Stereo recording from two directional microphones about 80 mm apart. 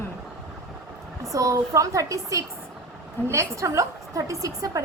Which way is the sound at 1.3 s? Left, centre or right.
Right.